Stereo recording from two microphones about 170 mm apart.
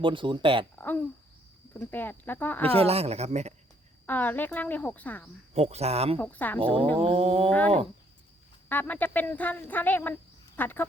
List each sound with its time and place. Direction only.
0.0 s speech: 30° right (ahead or behind)
0.8 s speech: 10° left (ahead or behind)
2.7 s speech: 35° right (ahead or behind)
4.0 s speech: 10° left (ahead or behind)
5.5 s speech: 40° right (ahead or behind)
6.1 s speech: 10° left (ahead or behind)
7.0 s speech: 30° right (ahead or behind)
8.7 s speech: 10° left (ahead or behind)